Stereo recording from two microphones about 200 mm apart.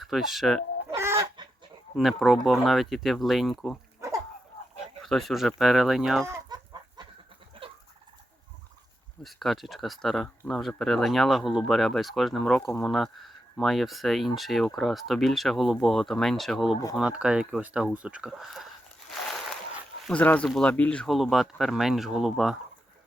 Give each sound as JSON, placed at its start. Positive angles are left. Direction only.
{"t": 0.0, "sound": "speech", "side_deg": 0}
{"t": 0.9, "sound": "chicken", "side_deg": -15}
{"t": 2.0, "sound": "speech", "side_deg": 0}
{"t": 4.0, "sound": "dog", "side_deg": -15}
{"t": 5.0, "sound": "speech", "side_deg": 0}
{"t": 6.5, "sound": "chicken", "side_deg": -20}
{"t": 9.2, "sound": "speech", "side_deg": 0}